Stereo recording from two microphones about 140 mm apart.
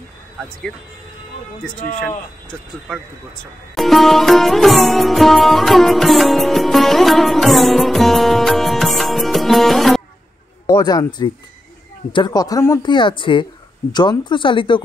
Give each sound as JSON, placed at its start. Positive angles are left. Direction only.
{"t": 2.9, "sound": "music", "side_deg": 0}
{"t": 10.7, "sound": "speech", "side_deg": 30}
{"t": 12.8, "sound": "speech", "side_deg": 35}